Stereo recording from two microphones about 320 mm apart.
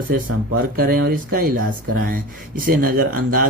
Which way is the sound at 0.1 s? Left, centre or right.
Right.